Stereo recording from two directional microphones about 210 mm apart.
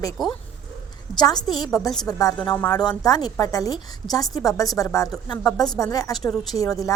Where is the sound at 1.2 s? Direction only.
20° left (ahead or behind).